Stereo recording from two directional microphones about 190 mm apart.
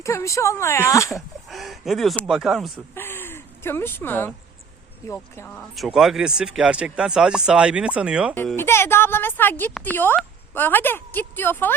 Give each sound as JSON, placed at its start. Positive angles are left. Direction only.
{"t": 0.0, "sound": "speech", "side_deg": 15}
{"t": 1.5, "sound": "speech", "side_deg": 0}
{"t": 2.9, "sound": "a sound", "side_deg": 10}
{"t": 5.0, "sound": "speech", "side_deg": 15}
{"t": 5.5, "sound": "speech", "side_deg": 0}
{"t": 8.5, "sound": "speech", "side_deg": 15}